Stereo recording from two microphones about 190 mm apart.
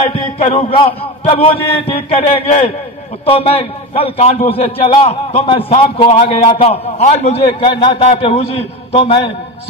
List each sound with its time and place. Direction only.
0.4 s a man's voice: 35° left (ahead or behind)